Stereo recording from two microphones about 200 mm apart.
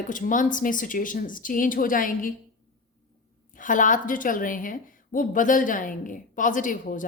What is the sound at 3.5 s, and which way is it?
A woman's voice, 40° left (ahead or behind).